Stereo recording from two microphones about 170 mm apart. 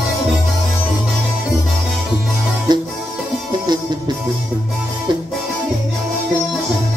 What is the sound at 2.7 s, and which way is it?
Music, 25° right (ahead or behind).